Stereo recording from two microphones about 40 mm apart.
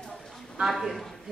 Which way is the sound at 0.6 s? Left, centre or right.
Centre.